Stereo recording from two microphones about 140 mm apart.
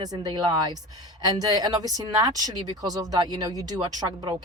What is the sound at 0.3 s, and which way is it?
Speech, 30° right (ahead or behind).